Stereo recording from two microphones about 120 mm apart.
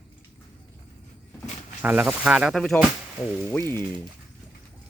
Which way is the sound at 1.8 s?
15° right (ahead or behind).